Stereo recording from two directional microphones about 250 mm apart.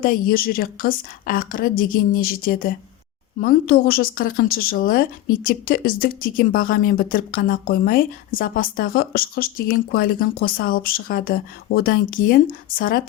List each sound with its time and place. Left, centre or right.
0.0 s a woman's voice: left